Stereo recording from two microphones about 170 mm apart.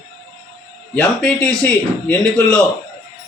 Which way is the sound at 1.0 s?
5° left (ahead or behind).